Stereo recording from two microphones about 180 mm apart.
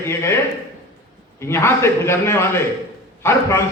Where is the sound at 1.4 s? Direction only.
15° left (ahead or behind).